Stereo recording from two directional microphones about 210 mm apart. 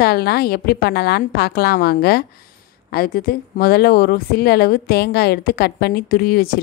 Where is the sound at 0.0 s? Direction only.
50° left (ahead or behind).